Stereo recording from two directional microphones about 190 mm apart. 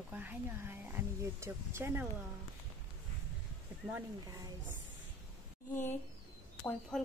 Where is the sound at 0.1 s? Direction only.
10° right (ahead or behind).